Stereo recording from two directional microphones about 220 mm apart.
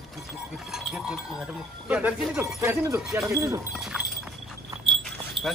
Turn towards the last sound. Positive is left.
turn(degrees=0)  # may be behind; listen again after turning